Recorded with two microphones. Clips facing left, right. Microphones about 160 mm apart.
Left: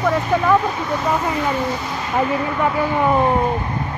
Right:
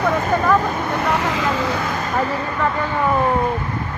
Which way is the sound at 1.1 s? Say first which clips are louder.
Left 1 dB; 90° right.